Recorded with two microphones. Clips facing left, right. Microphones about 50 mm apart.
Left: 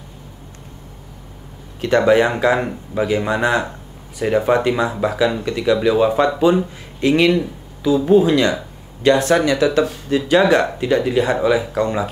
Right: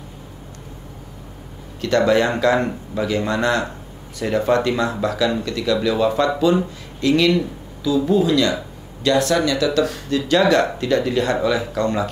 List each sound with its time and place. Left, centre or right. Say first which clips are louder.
1.8 s speech: left 3 dB; centre